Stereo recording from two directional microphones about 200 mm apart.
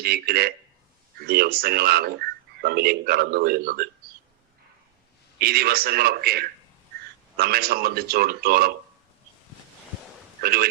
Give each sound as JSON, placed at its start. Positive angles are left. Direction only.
{"t": 0.0, "sound": "speech", "side_deg": -50}
{"t": 5.4, "sound": "speech", "side_deg": -50}
{"t": 10.4, "sound": "speech", "side_deg": -50}